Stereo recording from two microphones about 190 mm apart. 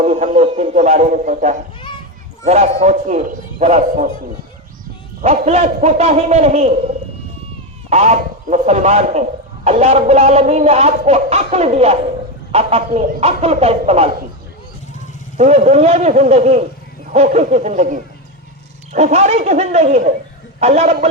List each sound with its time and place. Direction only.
0.0 s a sound: 45° right (ahead or behind)
0.3 s speech: 30° right (ahead or behind)
5.2 s speech: 35° right (ahead or behind)
15.4 s speech: 35° right (ahead or behind)